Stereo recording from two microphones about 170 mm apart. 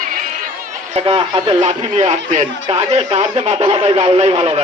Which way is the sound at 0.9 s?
35° right (ahead or behind).